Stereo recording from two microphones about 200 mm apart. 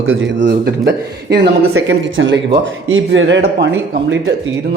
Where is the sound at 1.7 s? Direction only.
70° right (ahead or behind).